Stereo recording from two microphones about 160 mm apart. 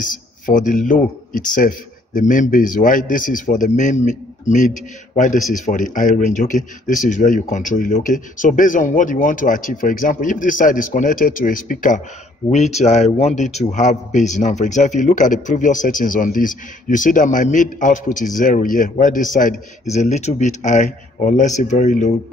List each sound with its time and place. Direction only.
0.0 s speech: 55° left (ahead or behind)
12.4 s a man's voice: 45° left (ahead or behind)